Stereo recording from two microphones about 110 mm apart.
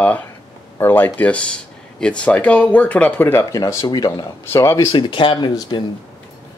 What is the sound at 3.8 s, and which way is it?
Speech, 40° left (ahead or behind).